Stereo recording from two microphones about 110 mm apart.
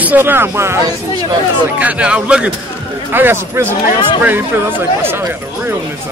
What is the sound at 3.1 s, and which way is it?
Speech, 20° right (ahead or behind).